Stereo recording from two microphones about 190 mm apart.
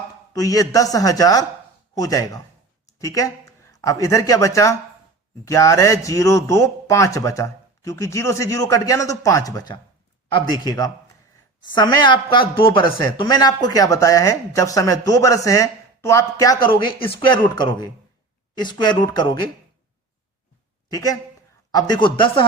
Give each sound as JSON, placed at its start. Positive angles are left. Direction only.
{"t": 0.3, "sound": "speech", "side_deg": 20}
{"t": 20.9, "sound": "speech", "side_deg": 20}